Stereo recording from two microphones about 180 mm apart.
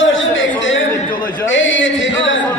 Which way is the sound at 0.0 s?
90° left.